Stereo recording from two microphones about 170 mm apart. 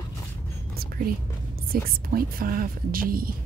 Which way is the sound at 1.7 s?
60° right (ahead or behind).